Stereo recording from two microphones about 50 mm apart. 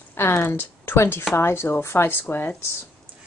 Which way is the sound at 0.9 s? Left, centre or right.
Left.